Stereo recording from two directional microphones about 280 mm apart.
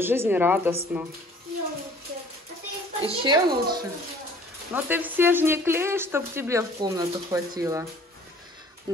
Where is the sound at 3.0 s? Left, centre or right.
Centre.